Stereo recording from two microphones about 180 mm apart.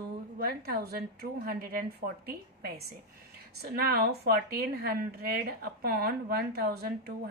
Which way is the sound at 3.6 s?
60° right (ahead or behind).